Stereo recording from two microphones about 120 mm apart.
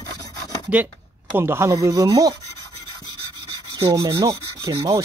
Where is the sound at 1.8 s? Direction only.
30° right (ahead or behind).